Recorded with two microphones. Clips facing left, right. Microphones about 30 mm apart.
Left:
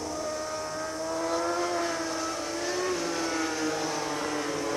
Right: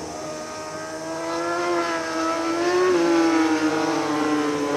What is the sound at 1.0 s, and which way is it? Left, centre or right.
Vehicle, centre.